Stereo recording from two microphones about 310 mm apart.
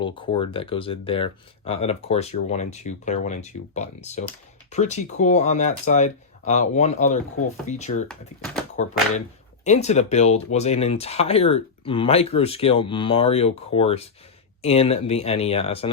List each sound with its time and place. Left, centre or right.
0.0 s speech: centre